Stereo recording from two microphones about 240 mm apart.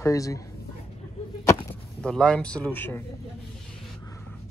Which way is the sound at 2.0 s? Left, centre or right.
Centre.